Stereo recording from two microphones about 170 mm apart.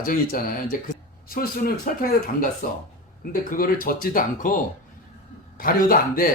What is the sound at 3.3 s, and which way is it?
Speech, 55° left (ahead or behind).